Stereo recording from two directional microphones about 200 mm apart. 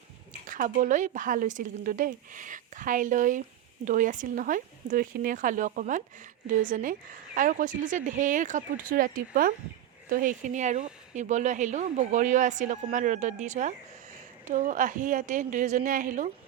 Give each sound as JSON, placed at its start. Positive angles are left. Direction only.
{"t": 0.4, "sound": "speech", "side_deg": -40}